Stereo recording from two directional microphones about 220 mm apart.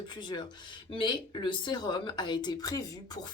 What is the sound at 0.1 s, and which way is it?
Speech, 20° left (ahead or behind).